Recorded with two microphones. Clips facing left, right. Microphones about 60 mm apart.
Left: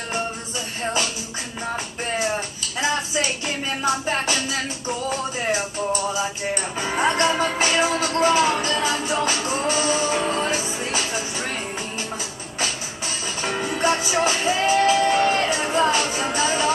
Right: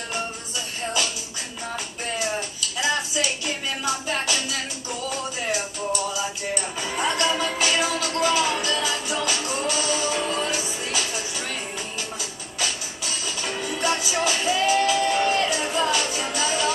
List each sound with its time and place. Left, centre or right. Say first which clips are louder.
2.8 s music: left 2 dB; left
13.4 s music: left 4 dB; left